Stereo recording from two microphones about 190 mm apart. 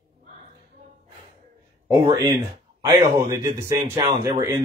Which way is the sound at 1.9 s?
20° right (ahead or behind).